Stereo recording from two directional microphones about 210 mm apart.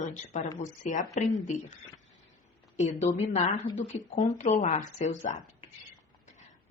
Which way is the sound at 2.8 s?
30° left (ahead or behind).